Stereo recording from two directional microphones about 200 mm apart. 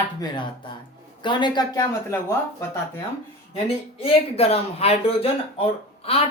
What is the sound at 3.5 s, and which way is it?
Speech, 30° left (ahead or behind).